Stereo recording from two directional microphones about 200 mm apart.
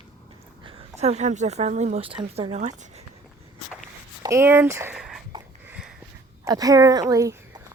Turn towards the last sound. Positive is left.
turn(degrees=-15)  # may be behind; listen again after turning